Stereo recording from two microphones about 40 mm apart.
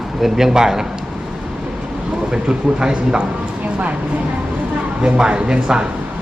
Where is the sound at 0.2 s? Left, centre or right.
Centre.